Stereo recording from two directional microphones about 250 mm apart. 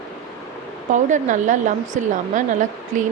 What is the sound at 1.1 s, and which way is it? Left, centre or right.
A woman's voice, right.